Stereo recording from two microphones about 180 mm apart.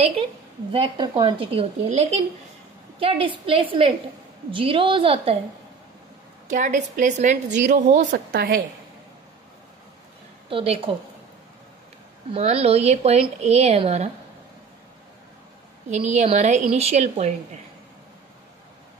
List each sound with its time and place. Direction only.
0.7 s a woman's voice: 30° right (ahead or behind)
6.5 s a woman's voice: 45° right (ahead or behind)
10.5 s speech: 30° right (ahead or behind)
12.3 s speech: 35° right (ahead or behind)
15.9 s speech: 40° right (ahead or behind)